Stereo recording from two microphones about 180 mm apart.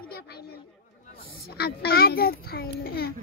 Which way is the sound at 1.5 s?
65° left (ahead or behind).